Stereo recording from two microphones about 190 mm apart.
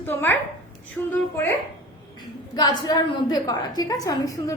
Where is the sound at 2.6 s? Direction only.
20° left (ahead or behind).